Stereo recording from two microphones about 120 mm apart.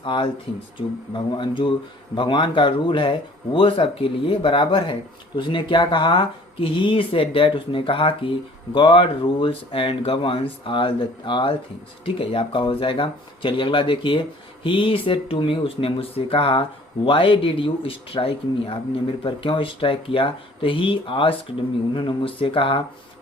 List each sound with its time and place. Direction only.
0.0 s speech: 45° left (ahead or behind)